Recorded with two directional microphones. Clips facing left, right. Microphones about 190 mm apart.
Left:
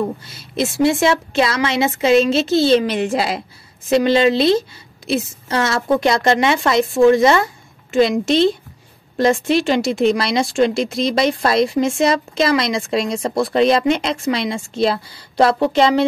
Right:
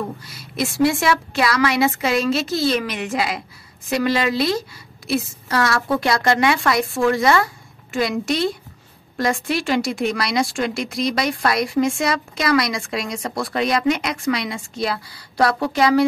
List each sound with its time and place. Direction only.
0.2 s speech: 25° left (ahead or behind)